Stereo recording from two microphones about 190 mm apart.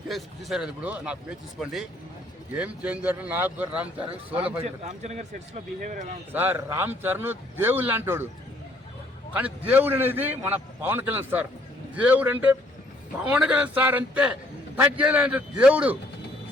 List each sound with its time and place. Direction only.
0.1 s a man's voice: centre (ahead or behind)
4.0 s a man's voice: 30° right (ahead or behind); by 6.1 s 45° right (ahead or behind)
6.3 s a man's voice: 10° right (ahead or behind)
9.3 s a man's voice: 10° right (ahead or behind)